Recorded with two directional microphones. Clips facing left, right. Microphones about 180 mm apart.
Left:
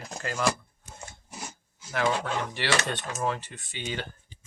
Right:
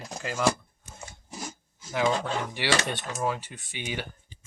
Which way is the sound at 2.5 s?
15° right (ahead or behind).